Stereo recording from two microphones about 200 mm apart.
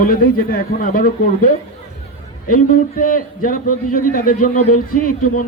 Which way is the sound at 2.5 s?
45° left (ahead or behind).